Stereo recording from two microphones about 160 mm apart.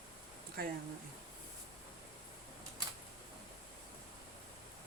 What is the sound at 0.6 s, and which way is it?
Speech, 70° right (ahead or behind).